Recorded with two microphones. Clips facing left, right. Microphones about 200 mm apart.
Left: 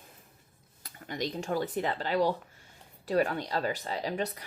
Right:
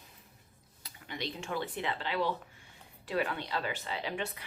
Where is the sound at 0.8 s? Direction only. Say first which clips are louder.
Left 5 dB; 45° left (ahead or behind).